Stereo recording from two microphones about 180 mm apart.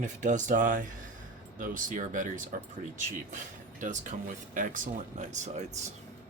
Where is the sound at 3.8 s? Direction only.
45° right (ahead or behind).